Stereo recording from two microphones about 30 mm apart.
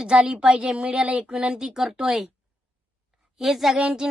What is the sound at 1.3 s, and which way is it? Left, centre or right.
Speech, right.